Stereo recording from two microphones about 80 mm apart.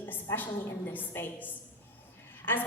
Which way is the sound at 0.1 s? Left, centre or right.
Left.